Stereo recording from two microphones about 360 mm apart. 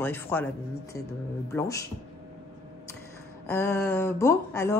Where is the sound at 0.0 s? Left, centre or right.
Centre.